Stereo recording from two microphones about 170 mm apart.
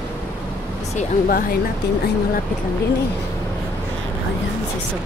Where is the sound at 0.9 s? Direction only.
60° left (ahead or behind).